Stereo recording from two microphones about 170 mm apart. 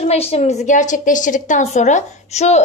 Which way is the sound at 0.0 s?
40° left (ahead or behind).